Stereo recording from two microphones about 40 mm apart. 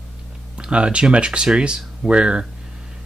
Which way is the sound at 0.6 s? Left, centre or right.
Right.